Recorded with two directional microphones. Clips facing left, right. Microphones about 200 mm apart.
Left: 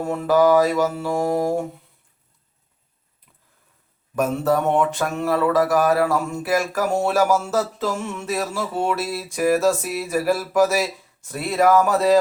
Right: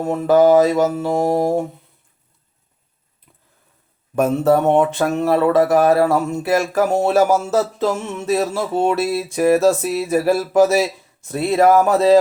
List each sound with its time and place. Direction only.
0.0 s mantra: 20° right (ahead or behind)
4.1 s mantra: 25° right (ahead or behind)